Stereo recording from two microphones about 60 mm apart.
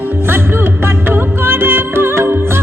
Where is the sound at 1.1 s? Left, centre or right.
Right.